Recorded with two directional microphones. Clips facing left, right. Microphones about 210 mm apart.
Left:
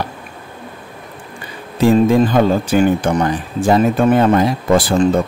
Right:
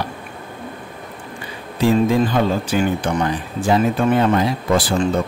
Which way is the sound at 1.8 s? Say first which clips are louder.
Left 4 dB; 45° left (ahead or behind).